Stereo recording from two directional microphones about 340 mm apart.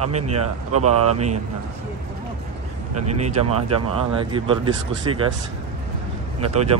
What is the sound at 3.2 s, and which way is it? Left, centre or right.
Speech, centre.